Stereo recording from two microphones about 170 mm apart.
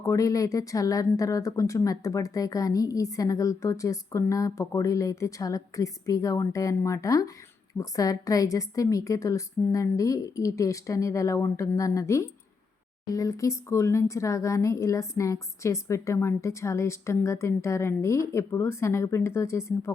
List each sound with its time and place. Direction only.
0.0 s a woman's voice: 20° left (ahead or behind)